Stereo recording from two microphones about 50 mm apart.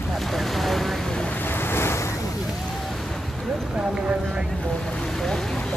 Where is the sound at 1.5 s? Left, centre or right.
Left.